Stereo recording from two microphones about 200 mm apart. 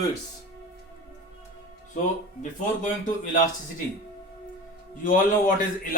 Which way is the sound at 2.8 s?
40° left (ahead or behind).